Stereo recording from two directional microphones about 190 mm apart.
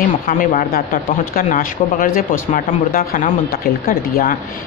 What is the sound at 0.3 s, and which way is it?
Speech, 45° left (ahead or behind).